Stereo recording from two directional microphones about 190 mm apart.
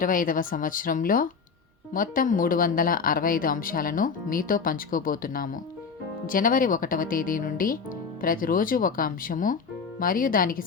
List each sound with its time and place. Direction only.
0.0 s speech: 45° left (ahead or behind)